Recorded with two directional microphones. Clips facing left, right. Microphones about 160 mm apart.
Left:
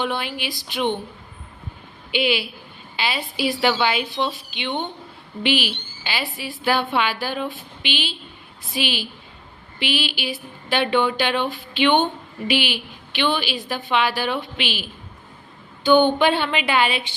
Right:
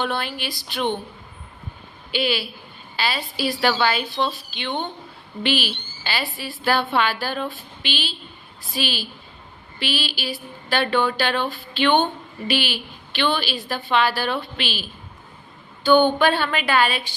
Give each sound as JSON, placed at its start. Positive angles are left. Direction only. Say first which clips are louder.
{"t": 0.0, "sound": "a woman's voice", "louder": "even", "side_deg": 15}
{"t": 2.1, "sound": "a woman's voice", "louder": "left 2 dB", "side_deg": 15}
{"t": 2.9, "sound": "a sound", "louder": "even", "side_deg": 15}
{"t": 3.3, "sound": "a woman's voice", "louder": "left 1 dB", "side_deg": 15}